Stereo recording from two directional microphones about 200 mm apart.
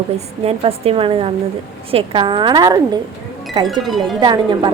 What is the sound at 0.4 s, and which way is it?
A woman's voice, 30° right (ahead or behind).